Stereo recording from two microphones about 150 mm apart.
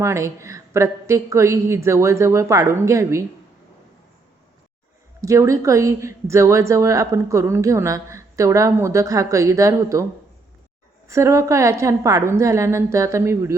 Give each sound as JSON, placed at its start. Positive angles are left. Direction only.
{"t": 0.0, "sound": "a woman's voice", "side_deg": -20}
{"t": 5.2, "sound": "a woman's voice", "side_deg": -20}
{"t": 11.1, "sound": "a woman's voice", "side_deg": -20}